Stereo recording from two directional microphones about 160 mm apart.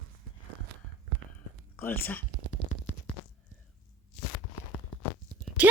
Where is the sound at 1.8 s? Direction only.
10° left (ahead or behind).